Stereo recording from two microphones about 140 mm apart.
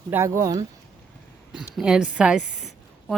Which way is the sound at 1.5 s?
5° right (ahead or behind).